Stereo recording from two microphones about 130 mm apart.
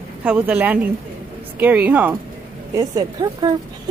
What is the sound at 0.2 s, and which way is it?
Speech, 10° right (ahead or behind).